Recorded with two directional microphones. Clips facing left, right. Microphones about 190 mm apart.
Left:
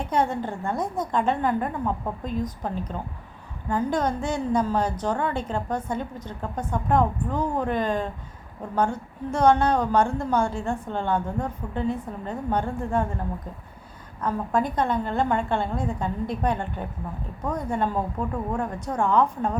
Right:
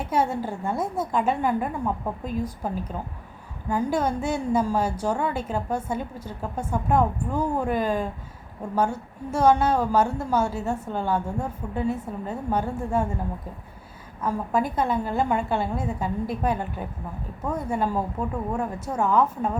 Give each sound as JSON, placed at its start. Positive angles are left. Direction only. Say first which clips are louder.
{"t": 0.0, "sound": "a woman's voice", "louder": "even", "side_deg": -5}
{"t": 14.2, "sound": "a woman's voice", "louder": "even", "side_deg": -5}